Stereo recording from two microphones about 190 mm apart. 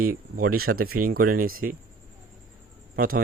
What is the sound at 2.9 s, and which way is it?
Speech, 50° right (ahead or behind).